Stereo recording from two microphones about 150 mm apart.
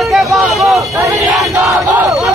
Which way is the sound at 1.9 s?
Centre (ahead or behind).